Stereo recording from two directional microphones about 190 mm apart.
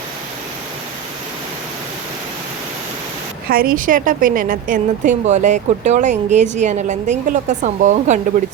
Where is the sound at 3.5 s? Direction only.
50° right (ahead or behind).